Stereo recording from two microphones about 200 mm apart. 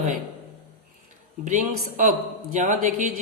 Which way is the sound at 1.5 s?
40° right (ahead or behind).